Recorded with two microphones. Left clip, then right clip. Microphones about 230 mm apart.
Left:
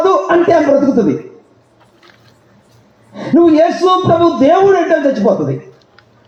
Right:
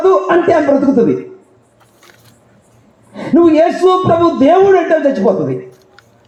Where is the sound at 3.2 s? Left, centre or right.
Right.